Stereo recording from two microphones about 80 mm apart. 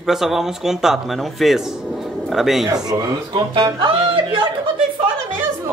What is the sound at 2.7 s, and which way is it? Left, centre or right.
Speech, right.